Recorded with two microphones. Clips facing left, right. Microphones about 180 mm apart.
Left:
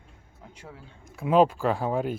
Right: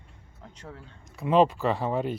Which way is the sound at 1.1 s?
5° left (ahead or behind).